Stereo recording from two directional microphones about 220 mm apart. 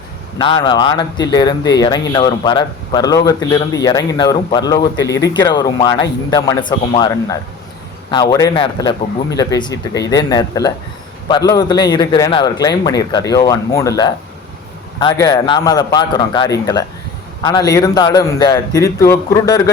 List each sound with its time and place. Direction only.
0.3 s speech: 20° left (ahead or behind)